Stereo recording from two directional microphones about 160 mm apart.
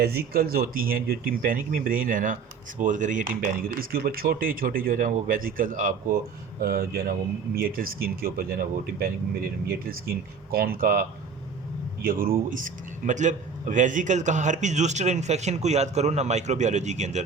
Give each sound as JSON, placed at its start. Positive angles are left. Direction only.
{"t": 0.0, "sound": "speech", "side_deg": -70}
{"t": 6.6, "sound": "speech", "side_deg": -70}
{"t": 12.0, "sound": "a man's voice", "side_deg": -65}